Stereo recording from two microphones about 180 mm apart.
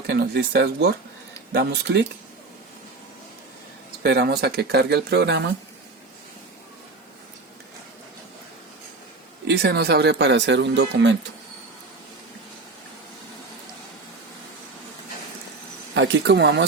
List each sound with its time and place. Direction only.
0.1 s speech: 65° right (ahead or behind)
4.0 s speech: 70° right (ahead or behind)
9.5 s speech: 65° right (ahead or behind)
16.0 s speech: 75° right (ahead or behind)